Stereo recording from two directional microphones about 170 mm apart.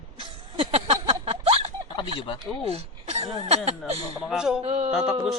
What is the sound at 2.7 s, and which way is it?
Speech, 35° right (ahead or behind).